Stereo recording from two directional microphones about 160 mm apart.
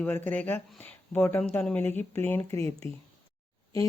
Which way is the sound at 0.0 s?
10° left (ahead or behind).